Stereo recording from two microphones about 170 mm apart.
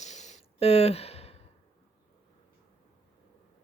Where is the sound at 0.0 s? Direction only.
45° left (ahead or behind).